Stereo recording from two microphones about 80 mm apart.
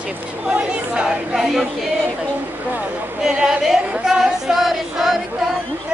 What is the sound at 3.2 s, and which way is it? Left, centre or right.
Choir, centre.